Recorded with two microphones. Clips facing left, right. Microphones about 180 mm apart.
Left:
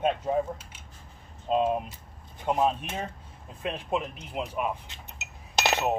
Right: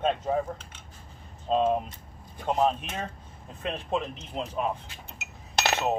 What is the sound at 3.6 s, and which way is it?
Speech, 10° left (ahead or behind).